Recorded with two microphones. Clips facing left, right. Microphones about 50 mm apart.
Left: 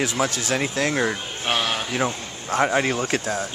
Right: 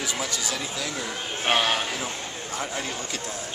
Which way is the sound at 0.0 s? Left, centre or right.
Left.